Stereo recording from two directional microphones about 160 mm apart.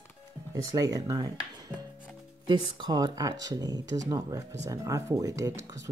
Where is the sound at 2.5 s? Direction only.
25° right (ahead or behind).